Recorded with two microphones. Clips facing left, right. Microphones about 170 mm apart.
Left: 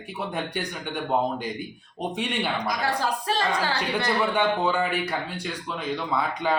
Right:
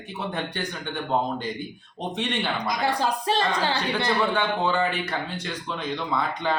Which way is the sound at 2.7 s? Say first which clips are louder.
Right 2 dB; 20° right (ahead or behind).